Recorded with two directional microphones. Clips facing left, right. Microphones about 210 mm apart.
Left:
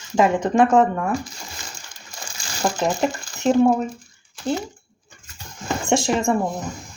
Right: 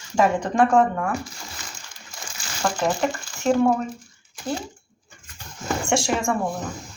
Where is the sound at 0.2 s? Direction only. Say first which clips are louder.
Left 2 dB; 20° left (ahead or behind).